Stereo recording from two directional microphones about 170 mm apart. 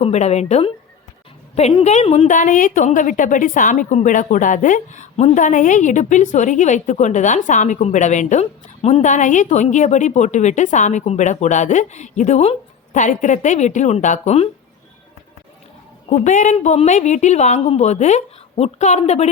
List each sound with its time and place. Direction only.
0.0 s a woman's voice: 40° left (ahead or behind)
16.0 s a woman's voice: 45° left (ahead or behind)